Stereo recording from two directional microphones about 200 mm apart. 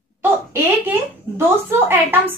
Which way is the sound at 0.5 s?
10° right (ahead or behind).